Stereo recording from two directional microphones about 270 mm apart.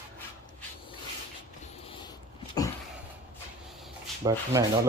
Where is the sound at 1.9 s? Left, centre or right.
Centre.